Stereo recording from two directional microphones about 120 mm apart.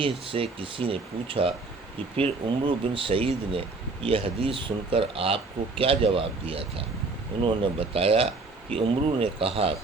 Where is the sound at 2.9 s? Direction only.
45° right (ahead or behind).